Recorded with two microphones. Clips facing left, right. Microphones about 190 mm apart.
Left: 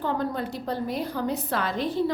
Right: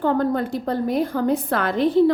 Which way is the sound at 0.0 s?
50° right (ahead or behind).